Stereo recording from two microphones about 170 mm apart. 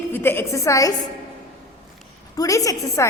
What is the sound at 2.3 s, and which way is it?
Speech, 20° left (ahead or behind).